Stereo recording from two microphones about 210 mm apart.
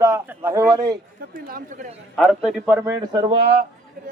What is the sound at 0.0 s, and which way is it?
Speech, 10° right (ahead or behind).